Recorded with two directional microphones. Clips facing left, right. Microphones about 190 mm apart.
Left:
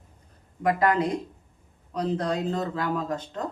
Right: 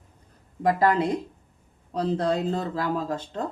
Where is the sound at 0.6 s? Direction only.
30° right (ahead or behind).